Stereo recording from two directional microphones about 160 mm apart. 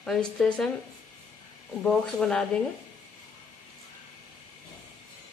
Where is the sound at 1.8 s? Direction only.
5° left (ahead or behind).